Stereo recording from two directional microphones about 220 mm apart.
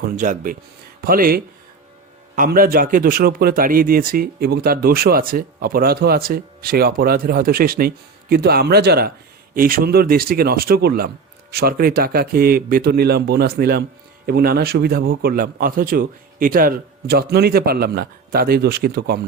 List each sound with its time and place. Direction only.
0.0 s speech: 40° right (ahead or behind)